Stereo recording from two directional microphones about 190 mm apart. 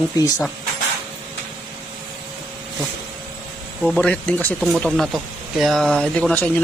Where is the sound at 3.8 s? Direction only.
5° left (ahead or behind).